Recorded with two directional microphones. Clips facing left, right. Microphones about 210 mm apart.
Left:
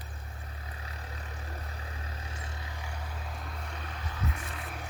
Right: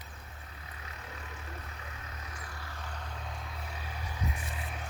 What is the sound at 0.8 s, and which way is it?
Vehicle, 35° left (ahead or behind).